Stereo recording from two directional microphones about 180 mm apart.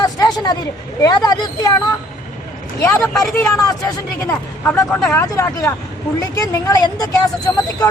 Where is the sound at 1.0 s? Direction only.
20° left (ahead or behind).